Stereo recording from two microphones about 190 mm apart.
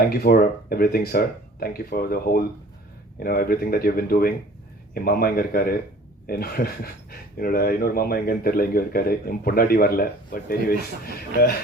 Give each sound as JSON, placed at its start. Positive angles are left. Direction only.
{"t": 0.0, "sound": "speech", "side_deg": 55}